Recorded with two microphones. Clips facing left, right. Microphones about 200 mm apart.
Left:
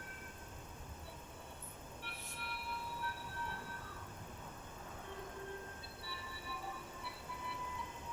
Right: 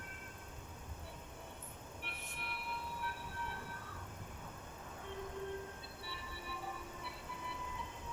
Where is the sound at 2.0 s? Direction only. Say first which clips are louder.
Right 2 dB; 20° right (ahead or behind).